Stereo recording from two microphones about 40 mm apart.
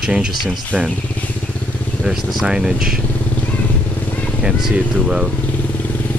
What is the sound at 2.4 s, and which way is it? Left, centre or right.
Speech, centre.